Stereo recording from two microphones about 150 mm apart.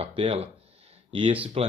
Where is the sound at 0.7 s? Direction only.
40° right (ahead or behind).